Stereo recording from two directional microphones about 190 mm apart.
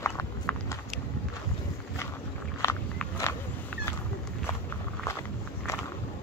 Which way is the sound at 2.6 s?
15° left (ahead or behind).